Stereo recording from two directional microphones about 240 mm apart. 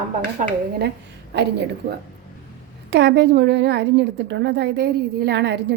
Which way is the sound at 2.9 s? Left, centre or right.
Right.